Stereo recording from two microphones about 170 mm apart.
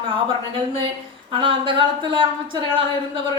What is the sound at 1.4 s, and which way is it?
Speech, 30° right (ahead or behind).